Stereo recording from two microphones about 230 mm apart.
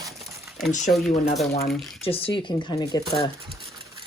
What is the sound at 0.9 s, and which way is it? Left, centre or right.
Speech, centre.